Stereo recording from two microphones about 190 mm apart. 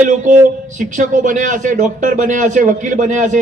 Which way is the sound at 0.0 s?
40° right (ahead or behind).